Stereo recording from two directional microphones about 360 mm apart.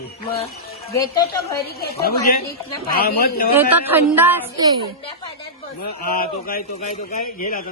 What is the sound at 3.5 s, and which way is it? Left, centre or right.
Speech, centre.